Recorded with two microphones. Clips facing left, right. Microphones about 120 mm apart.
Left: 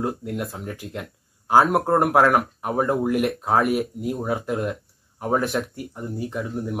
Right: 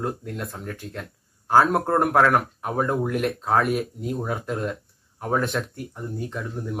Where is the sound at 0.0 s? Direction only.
10° left (ahead or behind).